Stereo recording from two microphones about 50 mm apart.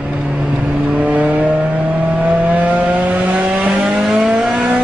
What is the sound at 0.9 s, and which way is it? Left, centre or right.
Vehicle, right.